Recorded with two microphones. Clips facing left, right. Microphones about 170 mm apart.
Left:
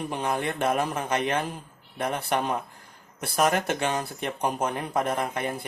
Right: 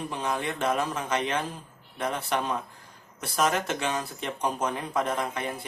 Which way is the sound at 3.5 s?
55° left (ahead or behind).